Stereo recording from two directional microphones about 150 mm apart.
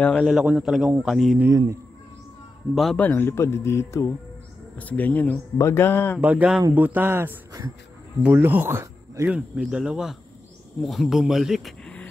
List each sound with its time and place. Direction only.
0.2 s a man's voice: 5° right (ahead or behind)
1.4 s speech: 20° right (ahead or behind)
2.7 s a man's voice: centre (ahead or behind)
3.0 s a man's voice: 15° left (ahead or behind)
6.2 s speech: 10° right (ahead or behind)
9.6 s a man's voice: 5° right (ahead or behind)